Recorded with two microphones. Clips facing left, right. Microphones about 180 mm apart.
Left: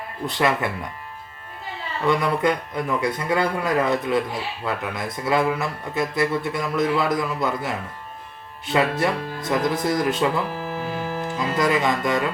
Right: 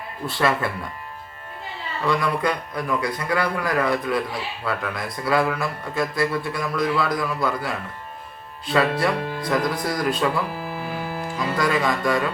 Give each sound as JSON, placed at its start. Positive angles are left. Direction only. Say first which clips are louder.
{"t": 0.3, "sound": "a man's voice", "louder": "even", "side_deg": 20}
{"t": 2.0, "sound": "a man's voice", "louder": "left 2 dB", "side_deg": 25}
{"t": 10.6, "sound": "music", "louder": "left 2 dB", "side_deg": -10}
{"t": 11.3, "sound": "speech", "louder": "left 1 dB", "side_deg": 20}